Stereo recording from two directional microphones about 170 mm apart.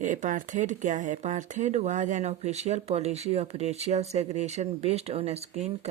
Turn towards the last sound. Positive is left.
turn(degrees=-40)  # may be behind; listen again after turning